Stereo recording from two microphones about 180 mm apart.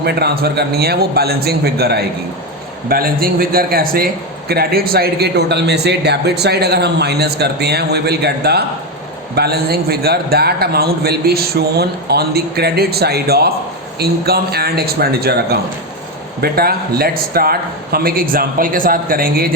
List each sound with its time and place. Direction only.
0.0 s a man's voice: 65° right (ahead or behind)